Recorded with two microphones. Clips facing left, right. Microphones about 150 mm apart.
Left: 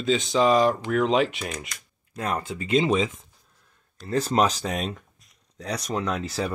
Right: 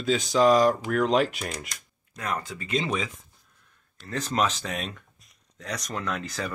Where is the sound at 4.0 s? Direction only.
35° left (ahead or behind).